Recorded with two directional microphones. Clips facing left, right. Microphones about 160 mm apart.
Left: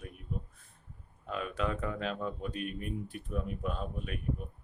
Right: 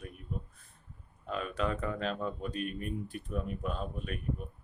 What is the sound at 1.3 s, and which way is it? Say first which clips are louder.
Speech: right 1 dB; 5° left (ahead or behind).